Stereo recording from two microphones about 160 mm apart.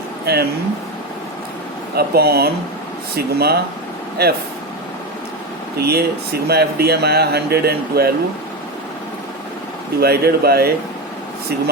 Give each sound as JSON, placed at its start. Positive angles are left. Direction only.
{"t": 0.3, "sound": "speech", "side_deg": -75}
{"t": 2.0, "sound": "speech", "side_deg": -80}
{"t": 5.7, "sound": "speech", "side_deg": -80}
{"t": 10.0, "sound": "speech", "side_deg": -75}